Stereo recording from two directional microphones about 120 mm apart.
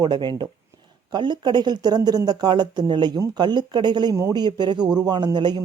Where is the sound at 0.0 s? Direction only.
35° right (ahead or behind).